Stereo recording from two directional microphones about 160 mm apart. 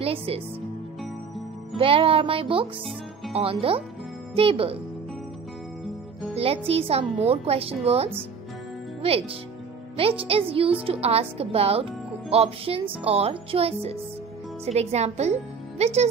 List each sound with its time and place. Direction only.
0.0 s speech: 40° right (ahead or behind)
1.8 s speech: 35° right (ahead or behind)
6.3 s speech: 40° right (ahead or behind)